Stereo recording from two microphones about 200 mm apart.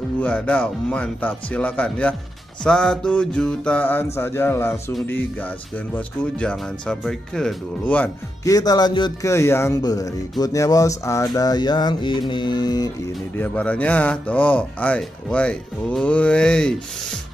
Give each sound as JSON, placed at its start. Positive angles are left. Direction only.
{"t": 0.2, "sound": "speech", "side_deg": 5}
{"t": 13.4, "sound": "speech", "side_deg": 5}